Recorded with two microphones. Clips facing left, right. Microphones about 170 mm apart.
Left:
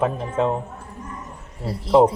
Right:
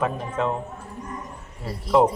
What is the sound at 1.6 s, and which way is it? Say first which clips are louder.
Speech: left 4 dB; 35° left (ahead or behind).